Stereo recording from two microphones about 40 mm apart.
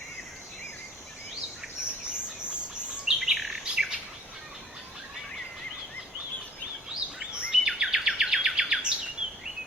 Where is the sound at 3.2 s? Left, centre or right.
Centre.